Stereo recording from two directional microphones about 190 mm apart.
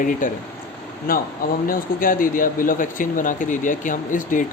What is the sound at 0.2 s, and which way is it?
Speech, 45° left (ahead or behind).